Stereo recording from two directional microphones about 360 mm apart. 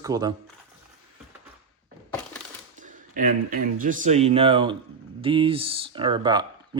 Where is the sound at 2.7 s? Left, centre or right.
Right.